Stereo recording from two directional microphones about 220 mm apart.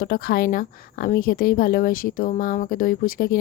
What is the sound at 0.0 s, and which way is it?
Speech, 40° left (ahead or behind).